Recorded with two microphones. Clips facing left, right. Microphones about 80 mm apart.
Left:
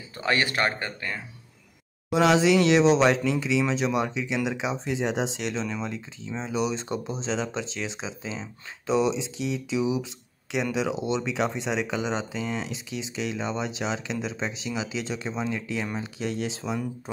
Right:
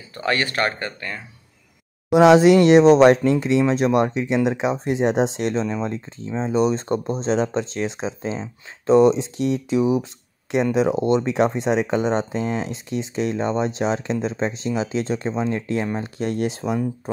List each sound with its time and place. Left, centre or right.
0.1 s speech: centre
2.1 s speech: right